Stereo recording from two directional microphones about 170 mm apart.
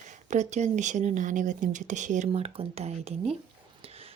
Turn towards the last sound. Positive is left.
turn(degrees=-35)  # may be behind; listen again after turning